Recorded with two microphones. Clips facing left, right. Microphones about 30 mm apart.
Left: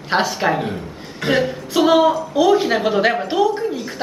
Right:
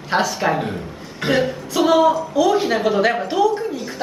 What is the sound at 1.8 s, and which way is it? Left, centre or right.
Speech, centre.